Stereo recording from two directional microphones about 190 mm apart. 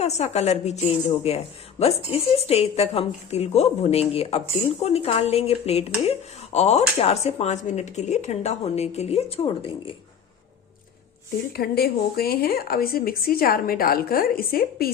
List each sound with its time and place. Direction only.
0.0 s speech: 35° left (ahead or behind)
11.5 s speech: 55° left (ahead or behind)